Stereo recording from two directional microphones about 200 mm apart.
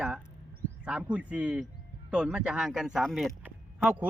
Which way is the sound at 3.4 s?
5° right (ahead or behind).